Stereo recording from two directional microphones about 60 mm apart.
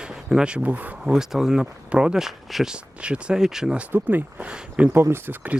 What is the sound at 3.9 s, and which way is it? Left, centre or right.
Speech, right.